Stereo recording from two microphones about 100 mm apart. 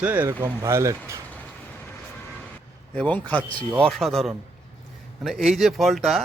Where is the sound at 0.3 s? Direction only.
35° right (ahead or behind).